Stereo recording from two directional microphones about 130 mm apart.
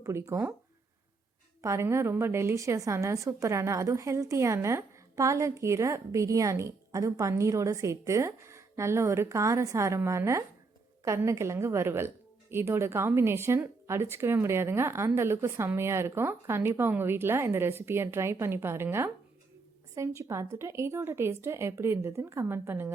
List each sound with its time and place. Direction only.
0.0 s a woman's voice: 20° right (ahead or behind)
1.6 s a woman's voice: 20° right (ahead or behind)